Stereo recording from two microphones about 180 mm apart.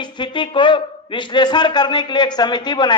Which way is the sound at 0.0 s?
25° left (ahead or behind).